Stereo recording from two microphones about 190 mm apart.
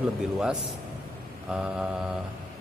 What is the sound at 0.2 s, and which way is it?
Speech, 5° right (ahead or behind).